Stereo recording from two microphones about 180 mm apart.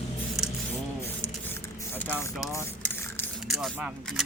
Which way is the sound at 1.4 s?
10° left (ahead or behind).